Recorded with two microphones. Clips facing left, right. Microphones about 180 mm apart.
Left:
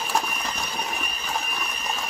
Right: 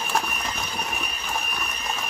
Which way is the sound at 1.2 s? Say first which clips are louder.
Left 2 dB; centre (ahead or behind).